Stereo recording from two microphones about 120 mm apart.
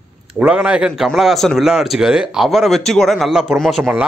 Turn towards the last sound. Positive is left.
turn(degrees=0)  # may be behind; listen again after turning